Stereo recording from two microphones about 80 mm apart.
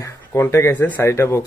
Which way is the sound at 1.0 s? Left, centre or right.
Left.